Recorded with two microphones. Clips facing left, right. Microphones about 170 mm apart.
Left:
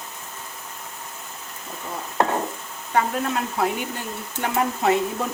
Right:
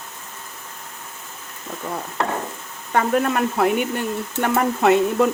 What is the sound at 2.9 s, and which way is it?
Speech, 60° right (ahead or behind).